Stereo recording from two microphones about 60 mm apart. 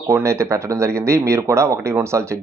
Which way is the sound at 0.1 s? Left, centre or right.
Right.